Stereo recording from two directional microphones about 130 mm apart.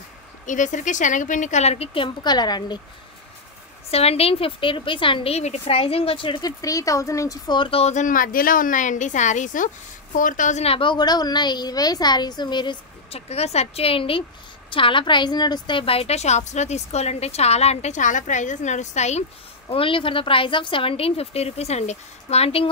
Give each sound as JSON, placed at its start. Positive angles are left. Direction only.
{"t": 0.5, "sound": "a woman's voice", "side_deg": 75}
{"t": 2.2, "sound": "a woman's voice", "side_deg": 30}
{"t": 3.9, "sound": "a woman's voice", "side_deg": 50}
{"t": 6.6, "sound": "speech", "side_deg": 25}
{"t": 7.8, "sound": "a woman's voice", "side_deg": 70}
{"t": 10.6, "sound": "a woman's voice", "side_deg": 45}
{"t": 13.1, "sound": "a woman's voice", "side_deg": 55}
{"t": 19.7, "sound": "a woman's voice", "side_deg": 45}